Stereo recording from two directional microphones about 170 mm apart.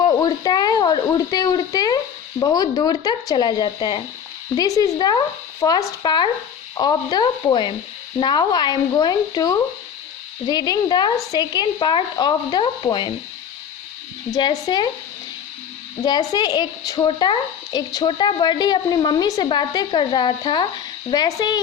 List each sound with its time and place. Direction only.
0.0 s a woman's voice: 20° left (ahead or behind)
14.3 s a woman's voice: 25° left (ahead or behind)
16.0 s a woman's voice: 25° left (ahead or behind)